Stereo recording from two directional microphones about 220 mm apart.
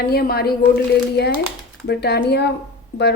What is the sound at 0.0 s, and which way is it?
A woman's voice, 45° left (ahead or behind).